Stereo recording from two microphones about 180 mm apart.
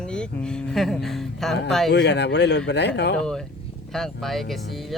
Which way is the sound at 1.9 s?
70° left (ahead or behind).